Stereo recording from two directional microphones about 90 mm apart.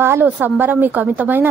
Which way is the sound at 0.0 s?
20° right (ahead or behind).